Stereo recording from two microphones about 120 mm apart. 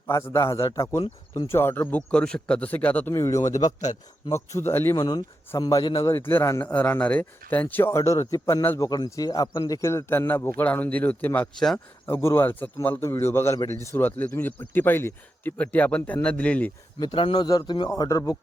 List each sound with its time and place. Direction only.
0.1 s speech: 25° left (ahead or behind)
3.1 s speech: 25° left (ahead or behind)
4.9 s a man's voice: 30° left (ahead or behind)
6.1 s speech: 20° left (ahead or behind)
17.0 s a man's voice: 45° left (ahead or behind)